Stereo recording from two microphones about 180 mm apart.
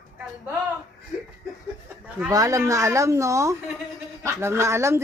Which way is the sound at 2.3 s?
20° right (ahead or behind).